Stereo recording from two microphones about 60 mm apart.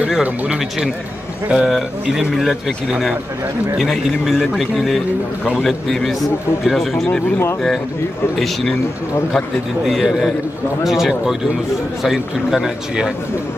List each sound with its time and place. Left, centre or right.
0.2 s a man's voice: centre
9.8 s a man's voice: centre